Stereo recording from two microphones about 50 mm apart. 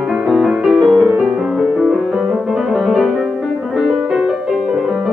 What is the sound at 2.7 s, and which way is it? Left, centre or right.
Music, centre.